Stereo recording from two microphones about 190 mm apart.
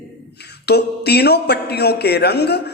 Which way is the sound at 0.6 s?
60° left (ahead or behind).